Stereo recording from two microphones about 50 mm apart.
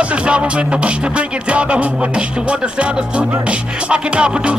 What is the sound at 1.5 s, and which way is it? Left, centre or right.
Music, right.